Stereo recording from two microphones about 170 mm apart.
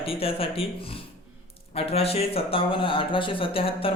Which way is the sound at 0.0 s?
35° left (ahead or behind).